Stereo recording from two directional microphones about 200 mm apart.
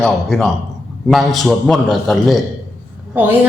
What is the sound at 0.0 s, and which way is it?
A woman's voice, centre (ahead or behind).